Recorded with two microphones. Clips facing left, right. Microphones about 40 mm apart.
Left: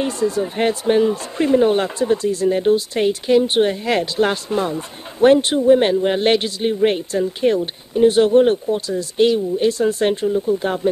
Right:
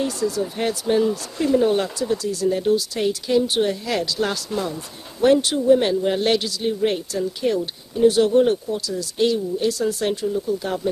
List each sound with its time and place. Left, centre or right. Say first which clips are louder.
0.0 s speech: left 3 dB; left